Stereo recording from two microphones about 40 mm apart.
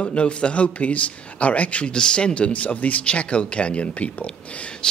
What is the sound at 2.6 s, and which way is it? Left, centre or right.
A man's voice, left.